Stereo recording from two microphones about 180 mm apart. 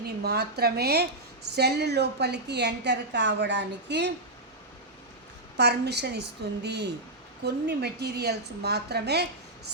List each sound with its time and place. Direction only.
0.0 s a woman's voice: 60° right (ahead or behind)
5.5 s a woman's voice: 65° right (ahead or behind)